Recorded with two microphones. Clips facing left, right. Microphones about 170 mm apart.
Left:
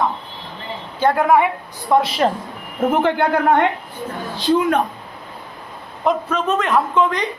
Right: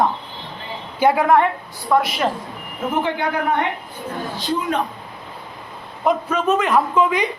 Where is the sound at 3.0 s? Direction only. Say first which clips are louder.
Left 5 dB; 60° left (ahead or behind).